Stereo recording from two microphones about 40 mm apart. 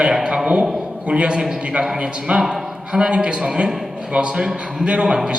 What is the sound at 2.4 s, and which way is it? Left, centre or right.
A man's voice, centre.